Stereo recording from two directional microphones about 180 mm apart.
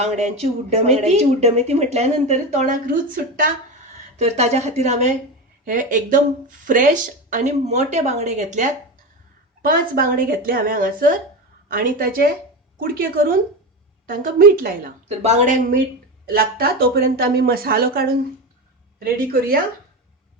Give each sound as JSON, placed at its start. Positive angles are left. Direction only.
{"t": 0.0, "sound": "speech", "side_deg": -35}
{"t": 4.2, "sound": "a woman's voice", "side_deg": -40}
{"t": 9.6, "sound": "a woman's voice", "side_deg": -50}
{"t": 15.2, "sound": "a woman's voice", "side_deg": -40}
{"t": 16.2, "sound": "speech", "side_deg": -55}